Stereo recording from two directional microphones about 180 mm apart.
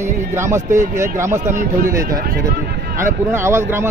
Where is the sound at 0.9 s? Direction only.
15° right (ahead or behind).